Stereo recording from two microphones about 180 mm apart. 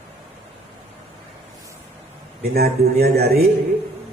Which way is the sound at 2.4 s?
60° right (ahead or behind).